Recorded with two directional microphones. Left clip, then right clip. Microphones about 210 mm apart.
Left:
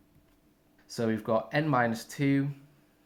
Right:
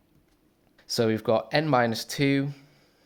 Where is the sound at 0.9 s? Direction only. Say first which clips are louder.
Right 5 dB; 45° right (ahead or behind).